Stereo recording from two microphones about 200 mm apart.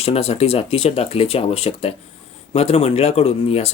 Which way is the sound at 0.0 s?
30° left (ahead or behind).